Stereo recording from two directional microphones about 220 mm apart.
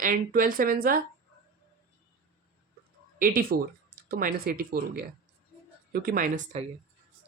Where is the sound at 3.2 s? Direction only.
40° right (ahead or behind).